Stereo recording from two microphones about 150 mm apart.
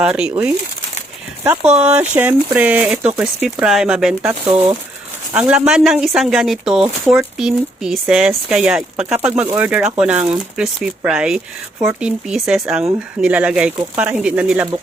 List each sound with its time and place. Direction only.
0.0 s speech: 5° right (ahead or behind)
1.8 s speech: 10° right (ahead or behind)
4.2 s speech: 15° right (ahead or behind)